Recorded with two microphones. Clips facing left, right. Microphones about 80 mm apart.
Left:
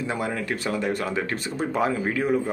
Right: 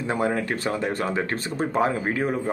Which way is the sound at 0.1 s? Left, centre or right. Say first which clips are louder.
Right 7 dB; right.